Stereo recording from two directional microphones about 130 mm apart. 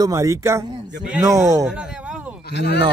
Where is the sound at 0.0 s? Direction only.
25° right (ahead or behind).